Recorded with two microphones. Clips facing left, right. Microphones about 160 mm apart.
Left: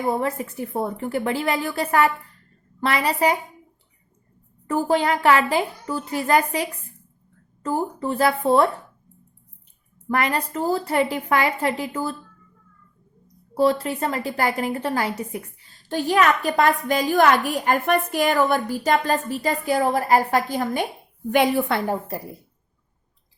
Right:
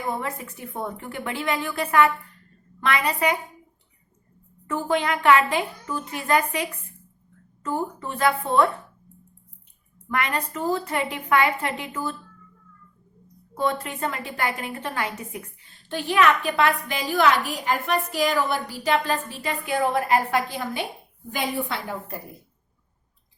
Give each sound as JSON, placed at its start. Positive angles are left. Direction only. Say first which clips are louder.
{"t": 0.0, "sound": "a woman's voice", "louder": "left 6 dB", "side_deg": 35}
{"t": 4.6, "sound": "a woman's voice", "louder": "left 4 dB", "side_deg": 35}
{"t": 10.1, "sound": "a woman's voice", "louder": "left 4 dB", "side_deg": 35}
{"t": 13.5, "sound": "a woman's voice", "louder": "left 6 dB", "side_deg": 35}
{"t": 21.3, "sound": "a woman's voice", "louder": "left 8 dB", "side_deg": 65}